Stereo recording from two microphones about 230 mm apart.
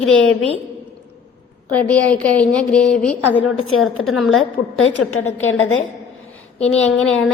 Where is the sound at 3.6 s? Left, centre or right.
Left.